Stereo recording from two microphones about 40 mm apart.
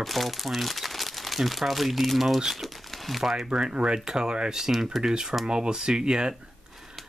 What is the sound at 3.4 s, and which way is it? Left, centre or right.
Speech, centre.